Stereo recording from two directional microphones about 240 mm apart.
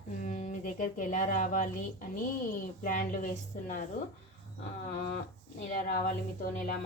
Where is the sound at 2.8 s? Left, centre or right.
Left.